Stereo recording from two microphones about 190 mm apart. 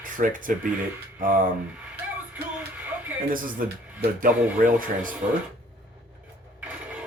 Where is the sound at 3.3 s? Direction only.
50° right (ahead or behind).